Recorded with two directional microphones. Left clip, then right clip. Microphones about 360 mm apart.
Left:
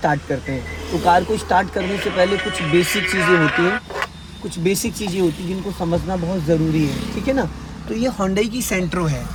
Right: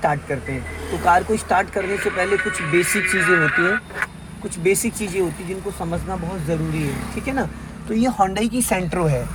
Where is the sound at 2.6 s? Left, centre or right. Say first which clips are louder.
Left 1 dB; left.